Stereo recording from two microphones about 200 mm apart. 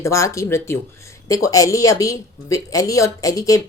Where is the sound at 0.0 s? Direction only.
15° left (ahead or behind).